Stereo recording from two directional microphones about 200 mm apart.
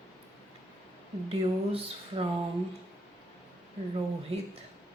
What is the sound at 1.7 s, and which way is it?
Speech, 30° right (ahead or behind).